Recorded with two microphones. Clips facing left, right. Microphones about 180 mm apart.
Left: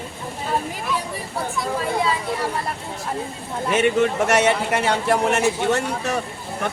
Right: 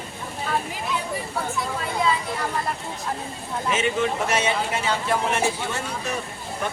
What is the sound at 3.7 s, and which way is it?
A man's voice, 60° left (ahead or behind).